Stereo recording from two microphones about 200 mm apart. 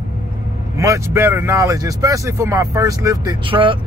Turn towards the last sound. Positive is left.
turn(degrees=-25)  # may be behind; listen again after turning